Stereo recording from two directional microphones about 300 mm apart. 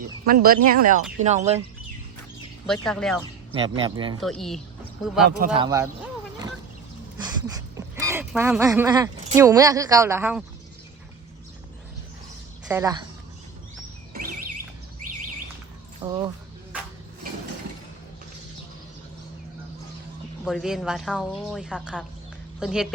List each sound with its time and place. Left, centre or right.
0.3 s speech: right
2.8 s speech: centre
3.5 s speech: centre
4.2 s speech: centre
5.5 s speech: centre
7.2 s speech: centre
12.6 s speech: centre
16.0 s speech: centre
20.4 s speech: centre